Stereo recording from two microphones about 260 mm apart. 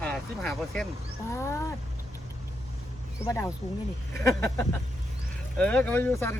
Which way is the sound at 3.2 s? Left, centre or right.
Centre.